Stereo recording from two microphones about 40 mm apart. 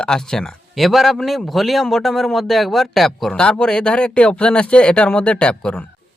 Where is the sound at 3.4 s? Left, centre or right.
Left.